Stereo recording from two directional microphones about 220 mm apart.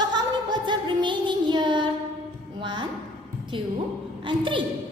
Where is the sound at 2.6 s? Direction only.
20° right (ahead or behind).